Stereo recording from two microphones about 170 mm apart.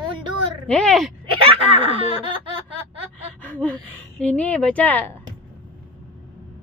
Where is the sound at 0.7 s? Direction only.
5° left (ahead or behind).